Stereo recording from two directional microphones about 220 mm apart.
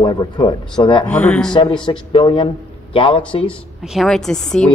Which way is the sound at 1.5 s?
20° left (ahead or behind).